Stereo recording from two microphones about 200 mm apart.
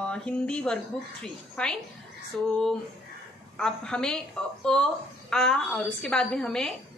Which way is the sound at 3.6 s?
5° left (ahead or behind).